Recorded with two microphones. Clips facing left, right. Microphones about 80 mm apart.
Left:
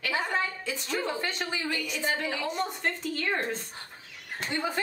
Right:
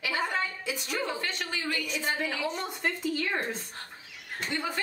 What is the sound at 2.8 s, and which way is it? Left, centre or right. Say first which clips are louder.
Speech: right 1 dB; centre.